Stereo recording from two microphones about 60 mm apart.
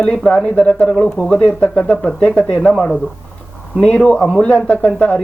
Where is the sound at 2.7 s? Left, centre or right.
Centre.